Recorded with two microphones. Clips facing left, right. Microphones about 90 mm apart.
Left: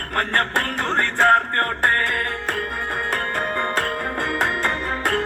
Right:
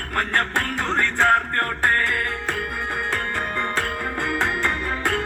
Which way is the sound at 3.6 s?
50° left (ahead or behind).